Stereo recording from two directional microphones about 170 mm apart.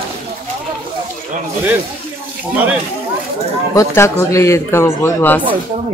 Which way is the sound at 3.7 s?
15° left (ahead or behind).